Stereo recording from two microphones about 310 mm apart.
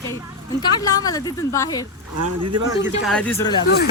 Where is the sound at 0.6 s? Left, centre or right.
Centre.